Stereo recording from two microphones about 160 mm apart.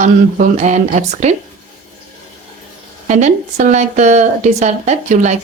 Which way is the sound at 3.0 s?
45° right (ahead or behind).